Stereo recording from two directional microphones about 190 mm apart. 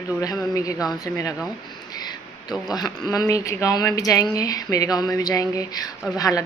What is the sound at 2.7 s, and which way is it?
A woman's voice, 20° left (ahead or behind).